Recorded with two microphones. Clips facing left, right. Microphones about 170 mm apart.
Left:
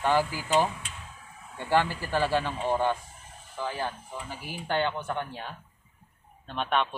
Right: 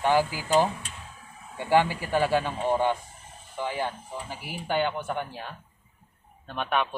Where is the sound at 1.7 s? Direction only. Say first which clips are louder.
Right 3 dB; 15° right (ahead or behind).